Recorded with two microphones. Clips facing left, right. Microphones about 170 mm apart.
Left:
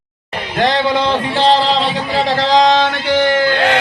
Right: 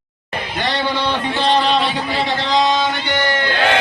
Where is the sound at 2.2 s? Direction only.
90° left.